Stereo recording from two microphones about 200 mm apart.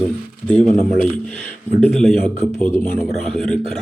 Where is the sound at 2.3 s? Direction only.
30° right (ahead or behind).